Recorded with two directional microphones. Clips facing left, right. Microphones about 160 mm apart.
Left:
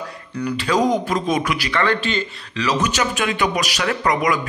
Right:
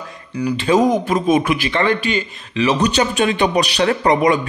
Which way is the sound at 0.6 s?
25° right (ahead or behind).